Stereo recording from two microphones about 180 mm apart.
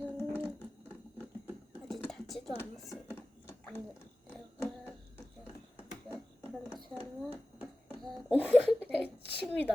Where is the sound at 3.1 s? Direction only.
10° left (ahead or behind).